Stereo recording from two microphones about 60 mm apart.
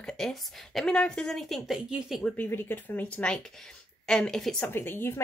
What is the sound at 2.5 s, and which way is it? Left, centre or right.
Speech, left.